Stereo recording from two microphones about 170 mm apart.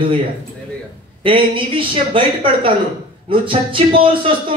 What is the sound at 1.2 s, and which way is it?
A woman's voice, 30° right (ahead or behind).